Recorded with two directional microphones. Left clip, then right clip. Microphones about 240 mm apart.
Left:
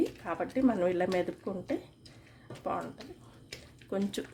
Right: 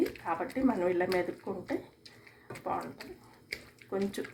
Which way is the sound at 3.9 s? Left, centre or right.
Left.